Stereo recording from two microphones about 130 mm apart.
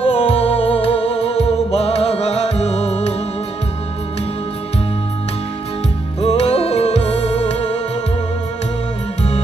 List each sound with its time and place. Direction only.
0.0 s music: 45° left (ahead or behind)
6.2 s music: 50° left (ahead or behind)